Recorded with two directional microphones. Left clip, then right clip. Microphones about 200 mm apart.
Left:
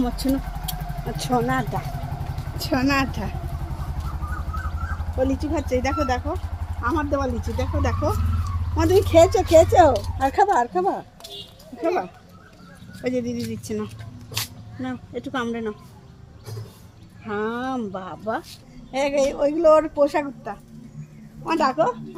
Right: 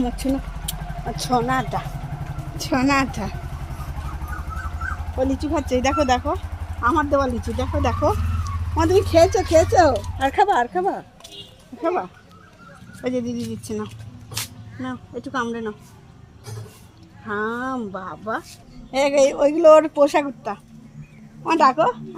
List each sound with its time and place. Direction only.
0.0 s speech: centre (ahead or behind)
1.5 s speech: 15° left (ahead or behind)
2.6 s a woman's voice: 15° right (ahead or behind)
5.2 s a woman's voice: 20° right (ahead or behind)
5.6 s speech: 40° right (ahead or behind)
8.7 s speech: 20° right (ahead or behind)
13.0 s speech: 15° right (ahead or behind)
17.2 s speech: 15° right (ahead or behind)
18.9 s a woman's voice: 35° right (ahead or behind)